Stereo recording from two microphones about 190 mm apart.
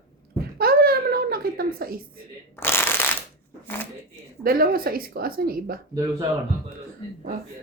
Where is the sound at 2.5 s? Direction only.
10° left (ahead or behind).